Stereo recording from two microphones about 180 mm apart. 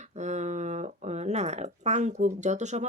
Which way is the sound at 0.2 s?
40° right (ahead or behind).